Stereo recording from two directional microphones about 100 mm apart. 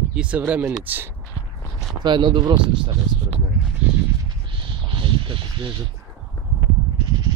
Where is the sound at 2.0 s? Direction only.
50° right (ahead or behind).